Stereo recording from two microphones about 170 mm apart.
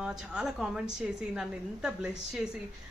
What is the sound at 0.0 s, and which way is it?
Speech, 5° right (ahead or behind).